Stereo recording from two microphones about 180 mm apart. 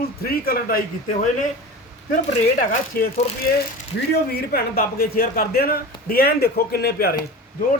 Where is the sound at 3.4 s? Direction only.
55° left (ahead or behind).